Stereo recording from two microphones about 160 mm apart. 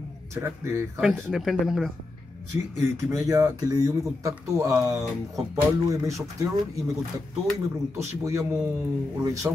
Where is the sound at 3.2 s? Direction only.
20° right (ahead or behind).